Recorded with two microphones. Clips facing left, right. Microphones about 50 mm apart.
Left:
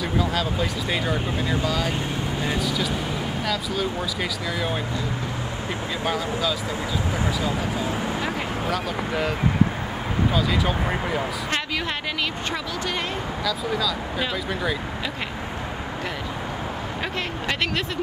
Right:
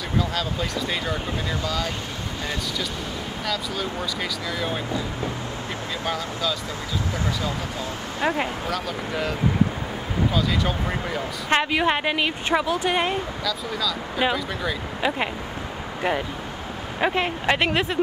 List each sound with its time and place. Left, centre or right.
0.2 s speech: centre
3.4 s speech: centre
6.0 s speech: centre
8.6 s speech: centre
10.3 s speech: centre
11.5 s a woman's voice: right
13.5 s speech: centre
17.0 s a woman's voice: right